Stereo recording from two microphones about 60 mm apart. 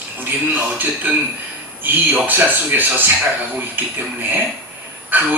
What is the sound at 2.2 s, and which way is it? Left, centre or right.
Speech, right.